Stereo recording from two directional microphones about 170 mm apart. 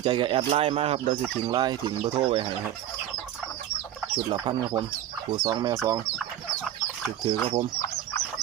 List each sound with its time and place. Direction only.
0.0 s speech: 30° right (ahead or behind)
4.1 s speech: 25° right (ahead or behind)
7.4 s speech: 30° right (ahead or behind)